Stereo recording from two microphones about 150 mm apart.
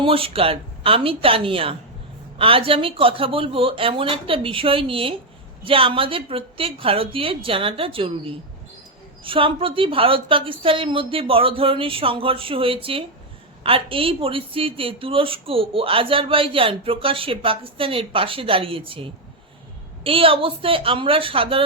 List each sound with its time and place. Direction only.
0.0 s a woman's voice: 35° right (ahead or behind)